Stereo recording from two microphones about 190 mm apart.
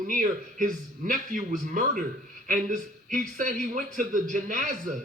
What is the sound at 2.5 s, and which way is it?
A man's voice, 45° right (ahead or behind).